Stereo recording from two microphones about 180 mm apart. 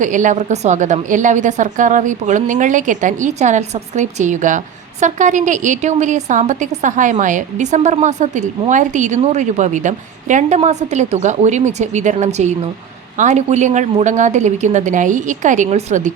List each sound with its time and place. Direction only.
0.0 s a woman's voice: 45° right (ahead or behind)